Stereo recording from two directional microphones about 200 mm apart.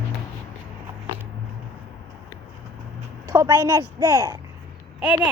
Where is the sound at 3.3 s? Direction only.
15° right (ahead or behind).